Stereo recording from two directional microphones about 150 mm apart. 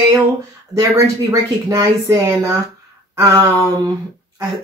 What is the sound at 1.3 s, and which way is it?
A woman's voice, 20° right (ahead or behind).